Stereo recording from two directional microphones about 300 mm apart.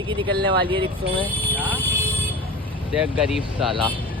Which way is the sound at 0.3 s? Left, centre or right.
Right.